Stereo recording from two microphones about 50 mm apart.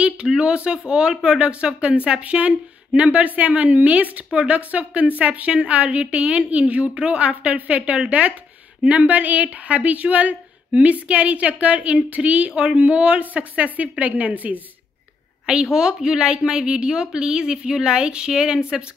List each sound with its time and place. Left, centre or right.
0.3 s a woman's voice: right
15.4 s a woman's voice: centre